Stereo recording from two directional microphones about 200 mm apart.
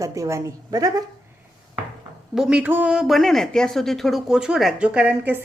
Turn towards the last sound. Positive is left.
turn(degrees=-10)  # may be behind; listen again after turning